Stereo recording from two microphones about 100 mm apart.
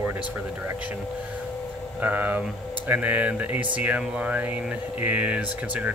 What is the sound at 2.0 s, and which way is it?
Speech, 15° right (ahead or behind).